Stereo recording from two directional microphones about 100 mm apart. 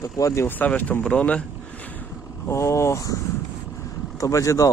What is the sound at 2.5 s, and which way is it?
Speech, 30° left (ahead or behind).